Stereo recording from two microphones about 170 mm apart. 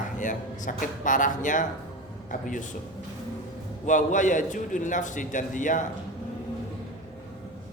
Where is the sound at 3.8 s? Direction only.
45° left (ahead or behind).